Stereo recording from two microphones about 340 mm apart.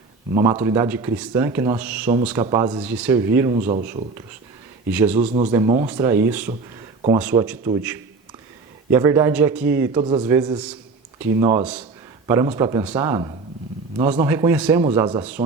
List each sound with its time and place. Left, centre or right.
0.3 s a man's voice: centre
4.9 s a man's voice: centre
5.1 s a man's voice: centre
8.9 s a man's voice: centre